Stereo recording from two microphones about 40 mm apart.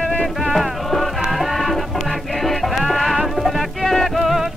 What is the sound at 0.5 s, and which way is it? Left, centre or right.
Music, centre.